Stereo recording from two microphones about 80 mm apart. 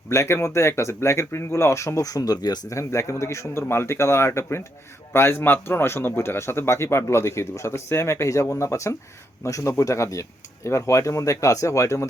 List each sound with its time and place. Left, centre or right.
0.1 s speech: left
2.6 s speech: left